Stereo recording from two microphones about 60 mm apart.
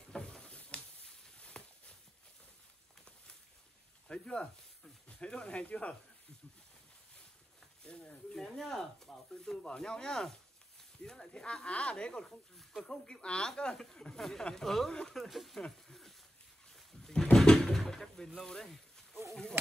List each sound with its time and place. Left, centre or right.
0.1 s a sound: centre
4.1 s speech: centre
7.8 s speech: centre
12.5 s speech: centre
12.9 s speech: centre
15.2 s speech: centre
15.9 s a sound: centre
16.7 s door: centre